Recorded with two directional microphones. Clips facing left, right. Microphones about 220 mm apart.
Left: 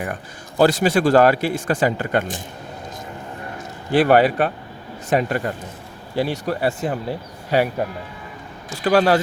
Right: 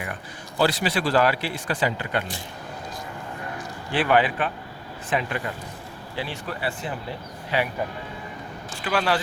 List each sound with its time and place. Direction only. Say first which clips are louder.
0.6 s speech: left 7 dB; 45° left (ahead or behind)
3.9 s a man's voice: left 7 dB; 40° left (ahead or behind)
8.7 s a man's voice: left 8 dB; 40° left (ahead or behind)